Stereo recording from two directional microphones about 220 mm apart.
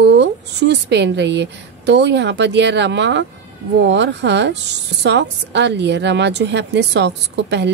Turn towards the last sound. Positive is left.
turn(degrees=-50)  # may be behind; listen again after turning